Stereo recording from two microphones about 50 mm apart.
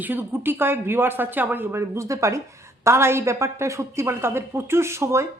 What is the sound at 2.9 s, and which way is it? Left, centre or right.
A woman's voice, right.